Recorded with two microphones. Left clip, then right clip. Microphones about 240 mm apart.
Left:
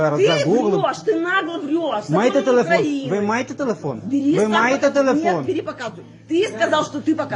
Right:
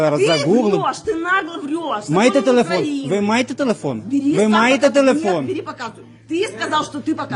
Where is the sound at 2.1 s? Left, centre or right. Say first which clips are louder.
Right 2 dB; right.